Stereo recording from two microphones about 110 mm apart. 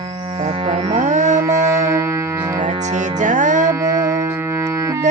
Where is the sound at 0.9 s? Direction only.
90° right.